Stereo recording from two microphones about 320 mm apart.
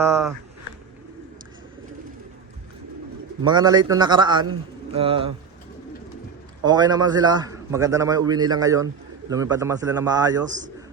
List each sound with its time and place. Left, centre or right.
0.0 s speech: centre
3.4 s a man's voice: centre
6.7 s a man's voice: centre